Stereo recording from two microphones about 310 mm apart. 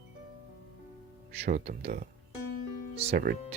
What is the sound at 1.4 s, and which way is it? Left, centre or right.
Speech, right.